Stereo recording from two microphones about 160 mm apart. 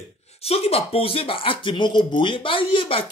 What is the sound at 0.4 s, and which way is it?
Speech, 40° left (ahead or behind).